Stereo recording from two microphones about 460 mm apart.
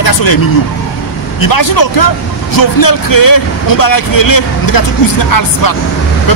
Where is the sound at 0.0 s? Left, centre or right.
Left.